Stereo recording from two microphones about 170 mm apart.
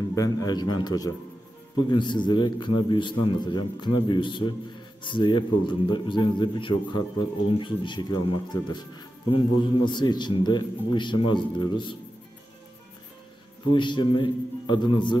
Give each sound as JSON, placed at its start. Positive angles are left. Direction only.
{"t": 0.1, "sound": "speech", "side_deg": 20}
{"t": 13.7, "sound": "speech", "side_deg": 25}